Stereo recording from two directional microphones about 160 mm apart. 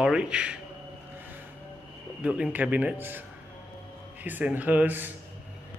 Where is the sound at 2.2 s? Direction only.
5° right (ahead or behind).